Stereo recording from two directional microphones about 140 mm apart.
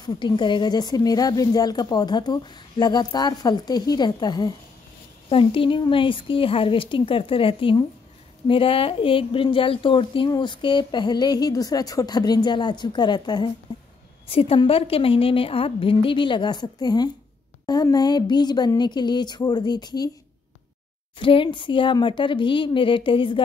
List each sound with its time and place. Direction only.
0.0 s a woman's voice: 30° left (ahead or behind)
14.2 s a woman's voice: 45° left (ahead or behind)
21.2 s speech: 40° left (ahead or behind)